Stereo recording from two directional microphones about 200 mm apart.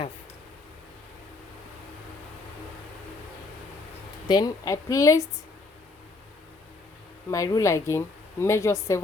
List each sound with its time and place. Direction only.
4.3 s a woman's voice: 20° left (ahead or behind)
7.3 s a woman's voice: 15° left (ahead or behind)